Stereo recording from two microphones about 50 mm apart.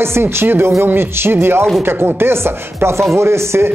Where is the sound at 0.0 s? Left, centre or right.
Right.